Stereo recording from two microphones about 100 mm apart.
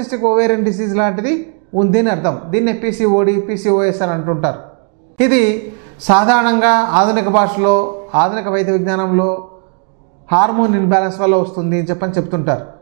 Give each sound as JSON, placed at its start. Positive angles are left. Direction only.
{"t": 0.0, "sound": "speech", "side_deg": -15}